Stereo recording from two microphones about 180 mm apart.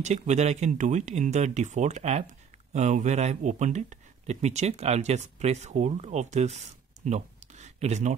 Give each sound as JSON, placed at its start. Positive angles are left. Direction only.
{"t": 0.0, "sound": "speech", "side_deg": -40}